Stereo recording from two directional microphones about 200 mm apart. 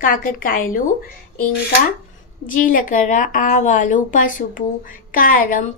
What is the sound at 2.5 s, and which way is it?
A woman's voice, 45° left (ahead or behind).